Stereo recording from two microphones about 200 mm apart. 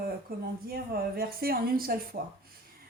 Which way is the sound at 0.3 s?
45° right (ahead or behind).